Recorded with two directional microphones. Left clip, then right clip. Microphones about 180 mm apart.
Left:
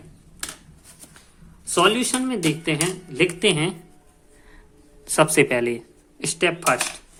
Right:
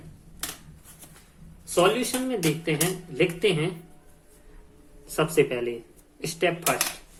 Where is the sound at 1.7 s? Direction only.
55° left (ahead or behind).